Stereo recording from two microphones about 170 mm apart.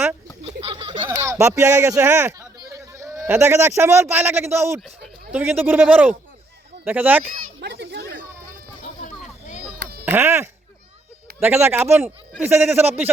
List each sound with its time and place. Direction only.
0.6 s a sound: 30° right (ahead or behind)
1.0 s speech: 15° right (ahead or behind)
7.6 s children playing: 85° right
10.1 s speech: 15° right (ahead or behind)